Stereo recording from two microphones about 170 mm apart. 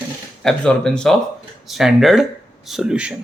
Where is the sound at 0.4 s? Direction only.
5° left (ahead or behind).